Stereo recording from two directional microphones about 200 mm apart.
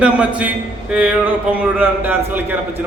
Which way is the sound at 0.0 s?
5° right (ahead or behind).